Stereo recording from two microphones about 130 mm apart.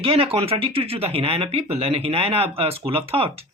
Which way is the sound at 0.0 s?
45° right (ahead or behind).